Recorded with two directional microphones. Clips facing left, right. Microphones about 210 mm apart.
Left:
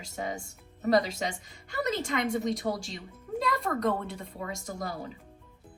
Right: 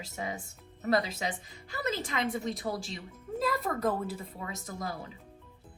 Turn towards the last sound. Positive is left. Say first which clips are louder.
# left 3 dB
turn(degrees=0)  # may be behind; listen again after turning